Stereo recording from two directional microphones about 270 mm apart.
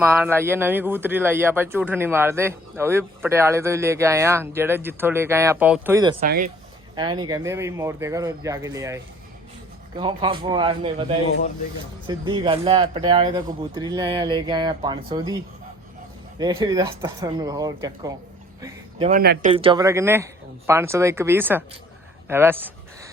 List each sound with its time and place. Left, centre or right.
0.0 s speech: centre
6.2 s speech: right
6.9 s speech: centre
10.0 s speech: centre
12.0 s speech: centre
16.4 s speech: centre
18.6 s a sound: centre
19.1 s speech: right
19.5 s speech: centre